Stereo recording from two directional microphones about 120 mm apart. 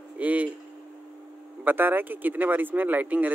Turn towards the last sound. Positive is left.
turn(degrees=-15)  # may be behind; listen again after turning